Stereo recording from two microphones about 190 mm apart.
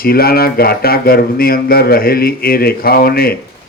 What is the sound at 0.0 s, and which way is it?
Speech, 55° left (ahead or behind).